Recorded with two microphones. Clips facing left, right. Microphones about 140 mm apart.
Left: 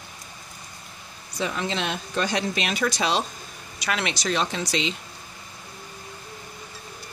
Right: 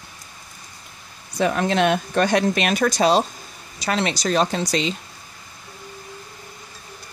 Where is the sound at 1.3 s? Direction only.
55° right (ahead or behind).